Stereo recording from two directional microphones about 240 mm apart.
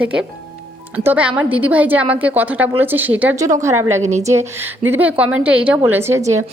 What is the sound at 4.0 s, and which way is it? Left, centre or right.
Speech, right.